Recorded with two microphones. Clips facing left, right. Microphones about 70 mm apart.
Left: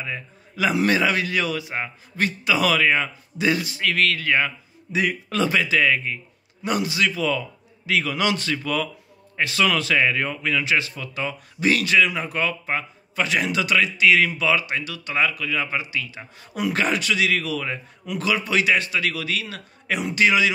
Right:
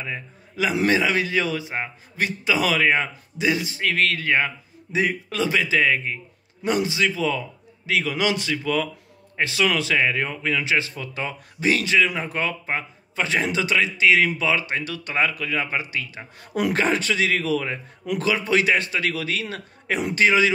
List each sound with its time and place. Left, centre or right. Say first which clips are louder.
0.0 s a man's voice: even; centre
3.7 s speech: even; right
5.3 s a man's voice: left 4 dB; centre
5.7 s a man's voice: even; right
9.6 s speech: left 1 dB; centre; by 16.7 s right
16.7 s a man's voice: left 1 dB; right
18.0 s speech: right 3 dB; right
18.3 s a man's voice: even; right